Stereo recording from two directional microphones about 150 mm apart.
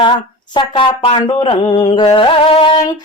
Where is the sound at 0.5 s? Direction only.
30° left (ahead or behind).